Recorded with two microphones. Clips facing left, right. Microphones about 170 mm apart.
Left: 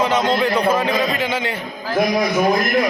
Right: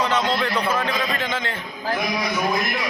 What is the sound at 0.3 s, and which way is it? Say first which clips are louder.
A man's voice: left 6 dB; 10° left (ahead or behind).